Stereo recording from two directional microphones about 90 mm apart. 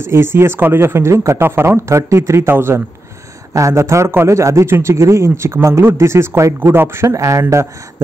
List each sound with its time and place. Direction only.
0.0 s a man's voice: 30° right (ahead or behind)